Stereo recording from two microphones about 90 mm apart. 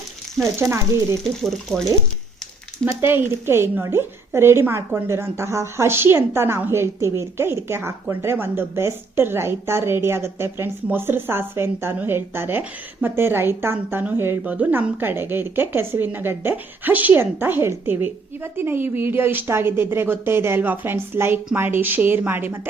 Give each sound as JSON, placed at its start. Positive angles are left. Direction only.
{"t": 0.4, "sound": "speech", "side_deg": 5}
{"t": 3.0, "sound": "a woman's voice", "side_deg": -25}